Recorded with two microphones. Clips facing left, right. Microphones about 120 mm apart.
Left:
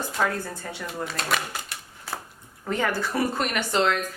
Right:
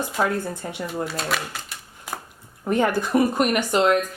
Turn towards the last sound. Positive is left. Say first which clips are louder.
# right 5 dB
turn(degrees=-15)  # may be behind; listen again after turning